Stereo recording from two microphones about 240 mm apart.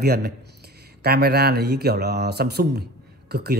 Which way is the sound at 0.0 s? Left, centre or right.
Right.